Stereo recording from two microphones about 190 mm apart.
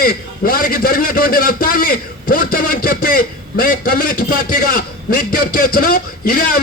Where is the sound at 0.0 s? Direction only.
50° left (ahead or behind).